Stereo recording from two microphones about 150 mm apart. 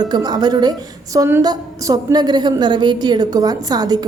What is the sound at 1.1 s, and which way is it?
Speech, 15° right (ahead or behind).